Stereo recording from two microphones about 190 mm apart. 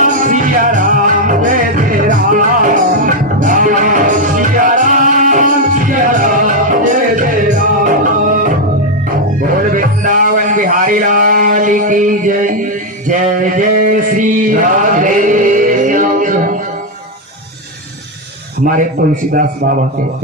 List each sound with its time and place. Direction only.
0.0 s music: 45° right (ahead or behind)
9.7 s a sound: 45° right (ahead or behind)
19.3 s speech: 45° right (ahead or behind)